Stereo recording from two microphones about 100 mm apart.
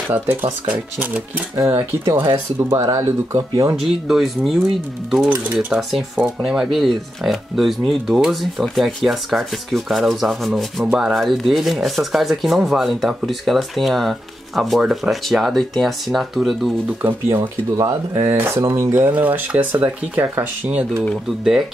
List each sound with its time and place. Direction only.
0.1 s speech: 15° right (ahead or behind)
1.6 s speech: 30° right (ahead or behind)
3.8 s speech: 5° right (ahead or behind)
5.2 s speech: 15° right (ahead or behind)
5.8 s speech: centre (ahead or behind)
17.4 s speech: 35° right (ahead or behind)